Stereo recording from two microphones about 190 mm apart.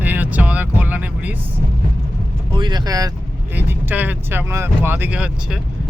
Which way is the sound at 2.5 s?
25° right (ahead or behind).